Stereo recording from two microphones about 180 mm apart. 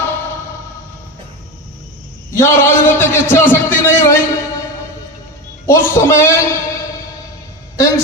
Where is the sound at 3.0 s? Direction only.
10° left (ahead or behind).